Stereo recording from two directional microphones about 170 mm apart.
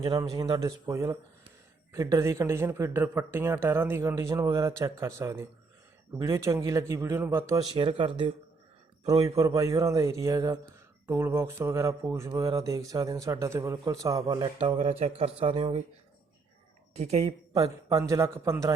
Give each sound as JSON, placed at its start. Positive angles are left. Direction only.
{"t": 0.0, "sound": "speech", "side_deg": -25}
{"t": 7.8, "sound": "speech", "side_deg": -30}
{"t": 9.0, "sound": "speech", "side_deg": -20}
{"t": 14.8, "sound": "speech", "side_deg": -40}
{"t": 16.9, "sound": "speech", "side_deg": -40}
{"t": 17.5, "sound": "speech", "side_deg": -20}